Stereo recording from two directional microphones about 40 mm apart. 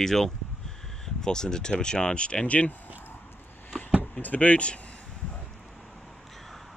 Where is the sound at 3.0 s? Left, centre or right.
Left.